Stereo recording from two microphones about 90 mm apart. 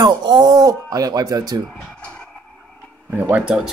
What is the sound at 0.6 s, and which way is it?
Speech, 40° right (ahead or behind).